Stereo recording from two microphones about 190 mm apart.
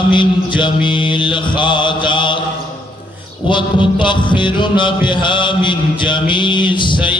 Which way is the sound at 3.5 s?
25° left (ahead or behind).